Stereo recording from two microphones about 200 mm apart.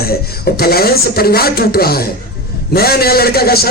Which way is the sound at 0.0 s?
50° left (ahead or behind).